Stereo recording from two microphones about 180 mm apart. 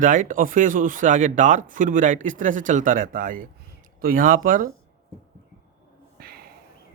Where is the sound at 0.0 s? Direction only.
45° right (ahead or behind).